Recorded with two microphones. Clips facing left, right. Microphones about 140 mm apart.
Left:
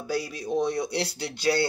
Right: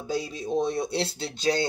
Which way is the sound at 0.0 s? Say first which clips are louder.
Even; 20° right (ahead or behind).